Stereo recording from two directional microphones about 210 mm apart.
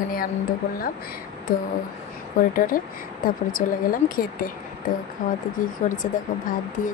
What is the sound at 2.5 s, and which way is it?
Speech, 40° left (ahead or behind).